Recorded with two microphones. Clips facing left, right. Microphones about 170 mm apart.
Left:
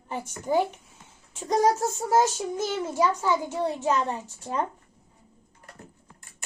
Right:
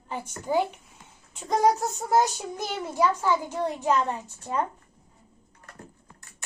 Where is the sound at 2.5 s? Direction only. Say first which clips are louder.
Left 3 dB; 15° left (ahead or behind).